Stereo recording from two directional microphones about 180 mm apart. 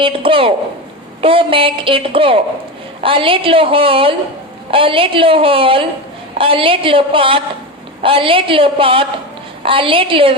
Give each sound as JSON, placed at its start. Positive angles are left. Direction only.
{"t": 0.0, "sound": "a woman's voice", "side_deg": -30}